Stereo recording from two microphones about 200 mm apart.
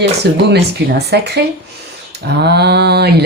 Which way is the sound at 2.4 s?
55° right (ahead or behind).